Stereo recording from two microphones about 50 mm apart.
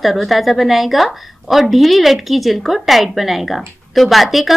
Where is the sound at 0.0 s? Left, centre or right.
Centre.